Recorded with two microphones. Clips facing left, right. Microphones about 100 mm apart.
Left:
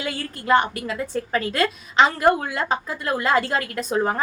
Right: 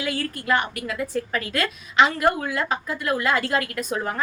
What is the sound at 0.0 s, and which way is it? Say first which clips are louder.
A woman's voice: right 2 dB; 30° left (ahead or behind).